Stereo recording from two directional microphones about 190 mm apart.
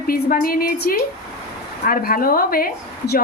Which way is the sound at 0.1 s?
50° left (ahead or behind).